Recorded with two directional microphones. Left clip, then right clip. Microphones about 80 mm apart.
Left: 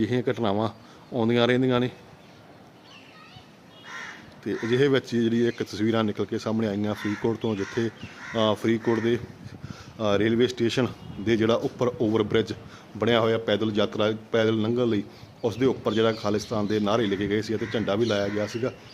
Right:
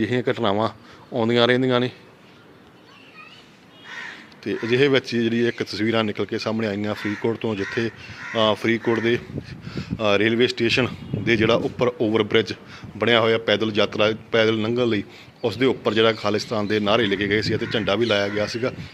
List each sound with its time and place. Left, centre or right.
0.0 s speech: left
4.4 s a man's voice: left